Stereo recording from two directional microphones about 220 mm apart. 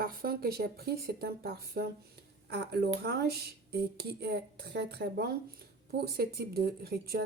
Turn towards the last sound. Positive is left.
turn(degrees=-45)  # may be behind; listen again after turning